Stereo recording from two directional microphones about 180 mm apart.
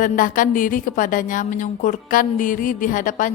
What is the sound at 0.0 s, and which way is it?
A woman's voice, 50° left (ahead or behind).